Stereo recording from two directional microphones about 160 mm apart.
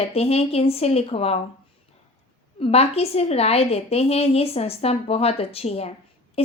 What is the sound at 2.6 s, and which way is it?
A woman's voice, 40° left (ahead or behind).